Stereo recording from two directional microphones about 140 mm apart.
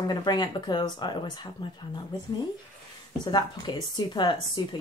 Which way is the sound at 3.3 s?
30° left (ahead or behind).